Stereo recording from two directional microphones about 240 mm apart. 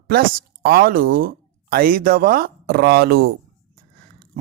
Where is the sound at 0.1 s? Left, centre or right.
Right.